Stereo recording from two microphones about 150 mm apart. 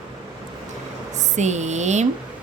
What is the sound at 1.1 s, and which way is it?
Speech, 50° right (ahead or behind).